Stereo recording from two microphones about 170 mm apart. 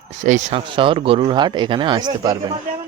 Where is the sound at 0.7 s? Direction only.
30° right (ahead or behind).